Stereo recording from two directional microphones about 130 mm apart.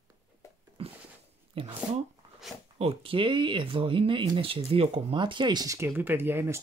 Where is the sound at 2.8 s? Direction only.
45° right (ahead or behind); by 6.6 s 20° right (ahead or behind).